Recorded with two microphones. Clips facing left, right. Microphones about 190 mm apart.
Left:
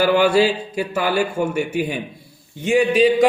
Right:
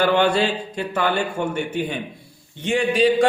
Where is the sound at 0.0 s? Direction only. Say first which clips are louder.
Left 3 dB; 5° left (ahead or behind).